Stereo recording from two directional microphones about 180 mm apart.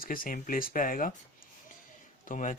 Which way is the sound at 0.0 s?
50° left (ahead or behind).